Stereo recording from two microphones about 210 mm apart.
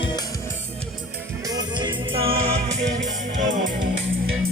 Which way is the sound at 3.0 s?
35° right (ahead or behind).